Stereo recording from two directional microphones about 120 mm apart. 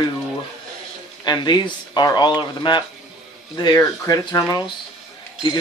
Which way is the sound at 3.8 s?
30° left (ahead or behind).